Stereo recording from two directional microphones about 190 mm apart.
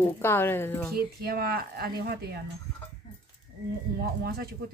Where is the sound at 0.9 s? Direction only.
55° right (ahead or behind).